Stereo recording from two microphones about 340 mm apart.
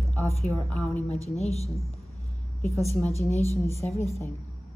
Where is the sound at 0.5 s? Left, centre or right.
Centre.